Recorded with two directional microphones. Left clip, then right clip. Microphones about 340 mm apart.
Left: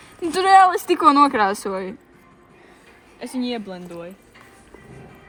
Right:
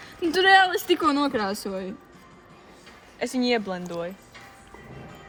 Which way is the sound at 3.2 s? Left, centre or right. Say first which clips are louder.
Right 3 dB; right.